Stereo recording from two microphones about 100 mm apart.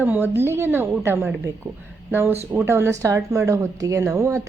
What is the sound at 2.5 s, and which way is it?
Speech, 25° right (ahead or behind).